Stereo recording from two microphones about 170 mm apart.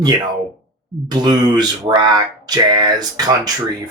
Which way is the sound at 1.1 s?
25° right (ahead or behind).